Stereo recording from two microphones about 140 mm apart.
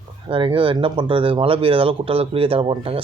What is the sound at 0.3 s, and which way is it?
A man's voice, 40° right (ahead or behind).